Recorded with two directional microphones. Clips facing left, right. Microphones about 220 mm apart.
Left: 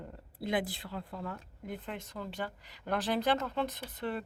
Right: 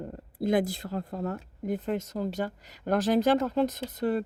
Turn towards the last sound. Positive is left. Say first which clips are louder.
# right 9 dB
turn(degrees=-40)  # may be behind; listen again after turning